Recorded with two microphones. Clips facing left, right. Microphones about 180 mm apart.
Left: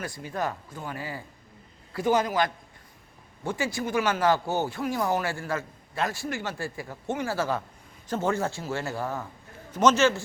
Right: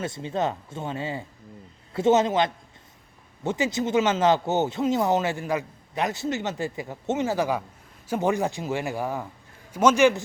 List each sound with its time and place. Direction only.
0.0 s speech: 25° right (ahead or behind)